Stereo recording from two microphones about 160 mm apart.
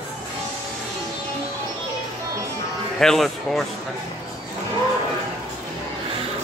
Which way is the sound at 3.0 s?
Centre (ahead or behind).